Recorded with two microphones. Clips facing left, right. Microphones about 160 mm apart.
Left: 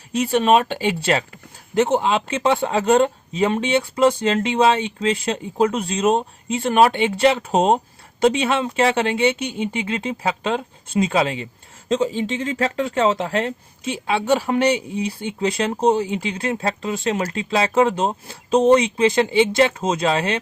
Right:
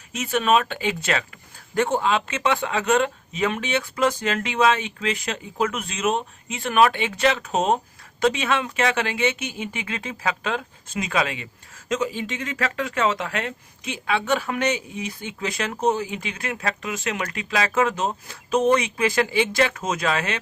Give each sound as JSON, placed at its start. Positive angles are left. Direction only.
{"t": 0.1, "sound": "speech", "side_deg": 35}